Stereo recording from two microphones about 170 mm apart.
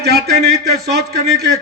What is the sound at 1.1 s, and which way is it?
Speech, 70° right (ahead or behind).